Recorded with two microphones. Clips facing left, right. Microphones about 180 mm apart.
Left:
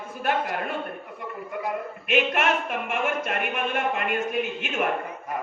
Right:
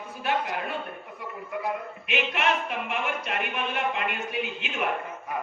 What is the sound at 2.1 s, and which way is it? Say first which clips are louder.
Speech: left 4 dB; 50° left (ahead or behind).